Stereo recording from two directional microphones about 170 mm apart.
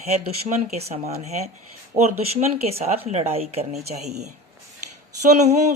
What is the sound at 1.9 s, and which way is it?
Speech, 20° right (ahead or behind).